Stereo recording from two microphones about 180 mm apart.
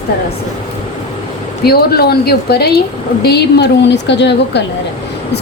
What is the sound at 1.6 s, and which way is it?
A woman's voice, 60° left (ahead or behind).